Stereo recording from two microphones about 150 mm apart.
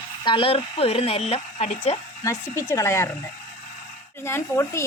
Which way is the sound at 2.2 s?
20° left (ahead or behind).